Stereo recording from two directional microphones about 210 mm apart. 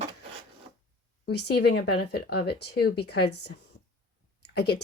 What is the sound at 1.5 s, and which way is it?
Speech, 50° left (ahead or behind).